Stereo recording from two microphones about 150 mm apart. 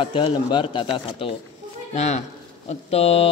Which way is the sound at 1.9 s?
50° left (ahead or behind).